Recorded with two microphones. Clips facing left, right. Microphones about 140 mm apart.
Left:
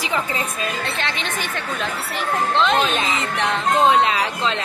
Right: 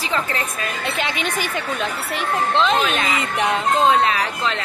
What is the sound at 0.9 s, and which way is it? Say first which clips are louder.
Speech: right 2 dB; 10° right (ahead or behind).